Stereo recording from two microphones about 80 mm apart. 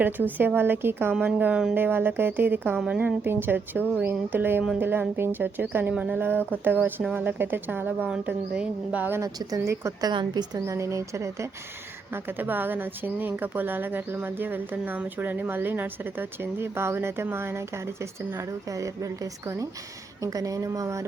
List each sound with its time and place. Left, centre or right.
0.0 s a woman's voice: right
1.4 s a woman's voice: centre
1.7 s a woman's voice: right
2.7 s a woman's voice: centre
3.2 s a woman's voice: right
9.2 s speech: right
10.0 s a woman's voice: right
10.7 s speech: right
12.1 s a woman's voice: right